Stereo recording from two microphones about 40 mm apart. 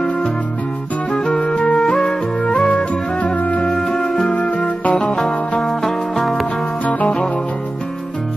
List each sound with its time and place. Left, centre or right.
1.1 s music: centre; by 3.6 s left
3.8 s music: centre
4.4 s music: left
5.6 s music: centre
6.8 s music: left